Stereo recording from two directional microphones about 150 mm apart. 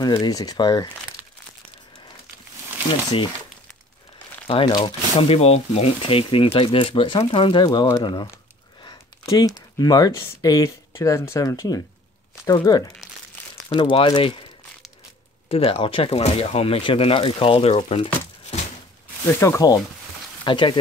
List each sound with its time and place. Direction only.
0.0 s speech: 25° left (ahead or behind)
4.5 s speech: 35° left (ahead or behind)
8.8 s a sound: 40° left (ahead or behind)
9.8 s speech: 25° left (ahead or behind)
15.4 s speech: 40° left (ahead or behind)
18.5 s a sound: 40° left (ahead or behind)
19.2 s speech: 20° left (ahead or behind)
20.4 s speech: 35° left (ahead or behind)